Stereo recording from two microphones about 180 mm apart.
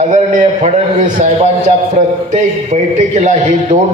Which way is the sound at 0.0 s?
40° right (ahead or behind).